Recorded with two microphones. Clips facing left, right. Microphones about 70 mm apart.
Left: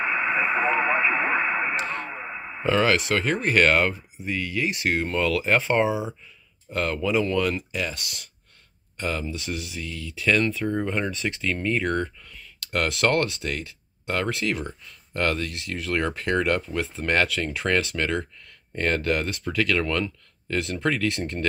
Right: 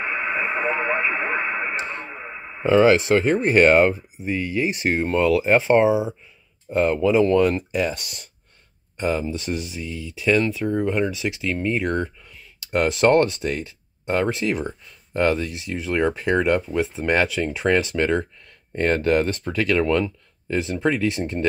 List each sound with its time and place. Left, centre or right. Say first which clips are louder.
0.0 s radio: left 1 dB; centre
1.8 s speech: left 1 dB; right
2.0 s radio: left 1 dB; centre
2.6 s speech: right 6 dB; right
9.3 s speech: right 4 dB; right; by 21.5 s centre